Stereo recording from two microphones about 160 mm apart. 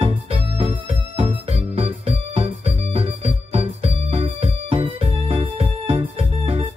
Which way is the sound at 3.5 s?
40° right (ahead or behind).